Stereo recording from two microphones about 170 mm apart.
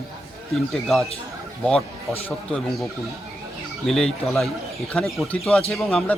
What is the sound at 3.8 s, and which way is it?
Speech, 5° left (ahead or behind).